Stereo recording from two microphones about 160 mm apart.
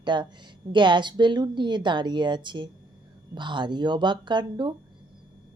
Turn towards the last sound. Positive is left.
turn(degrees=-30)  # may be behind; listen again after turning